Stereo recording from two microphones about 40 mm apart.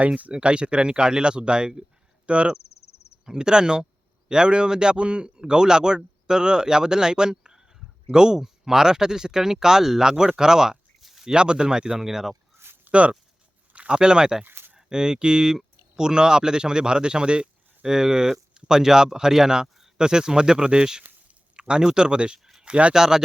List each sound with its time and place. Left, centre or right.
0.0 s speech: right
0.3 s a man's voice: right
3.2 s a man's voice: centre
11.0 s a sound: centre
11.3 s a man's voice: right
11.9 s speech: centre
12.9 s a man's voice: right
23.0 s speech: centre